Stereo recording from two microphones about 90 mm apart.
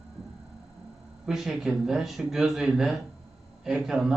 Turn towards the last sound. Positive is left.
turn(degrees=-5)  # may be behind; listen again after turning